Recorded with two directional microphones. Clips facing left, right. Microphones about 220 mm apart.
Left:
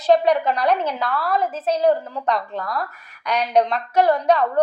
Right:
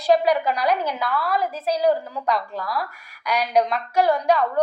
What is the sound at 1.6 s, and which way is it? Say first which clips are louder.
A woman's voice: left 2 dB; 10° right (ahead or behind).